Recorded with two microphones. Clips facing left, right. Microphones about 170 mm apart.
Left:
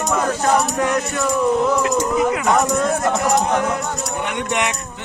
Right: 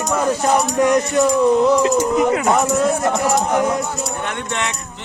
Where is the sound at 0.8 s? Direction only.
15° right (ahead or behind).